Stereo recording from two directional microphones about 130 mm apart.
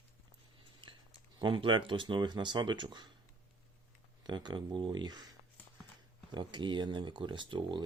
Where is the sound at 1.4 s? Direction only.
40° right (ahead or behind).